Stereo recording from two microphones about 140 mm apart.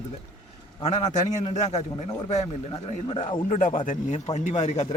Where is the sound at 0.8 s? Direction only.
55° left (ahead or behind).